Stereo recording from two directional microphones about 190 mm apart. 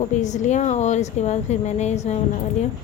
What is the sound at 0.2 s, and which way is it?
A woman's voice, 40° left (ahead or behind).